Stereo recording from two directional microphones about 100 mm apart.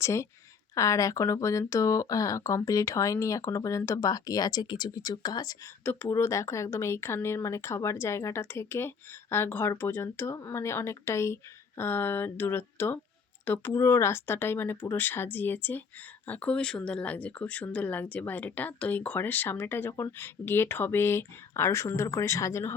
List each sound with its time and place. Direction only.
0.0 s speech: 30° left (ahead or behind)
5.8 s speech: 20° left (ahead or behind)
6.1 s speech: 30° left (ahead or behind)